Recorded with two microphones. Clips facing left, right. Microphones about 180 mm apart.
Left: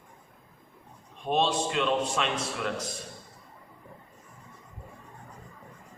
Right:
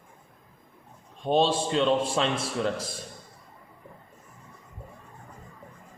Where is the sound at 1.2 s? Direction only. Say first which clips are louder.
Right 3 dB; 30° right (ahead or behind).